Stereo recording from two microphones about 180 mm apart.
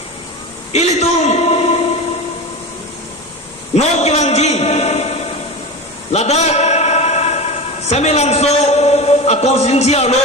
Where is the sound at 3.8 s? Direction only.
35° left (ahead or behind).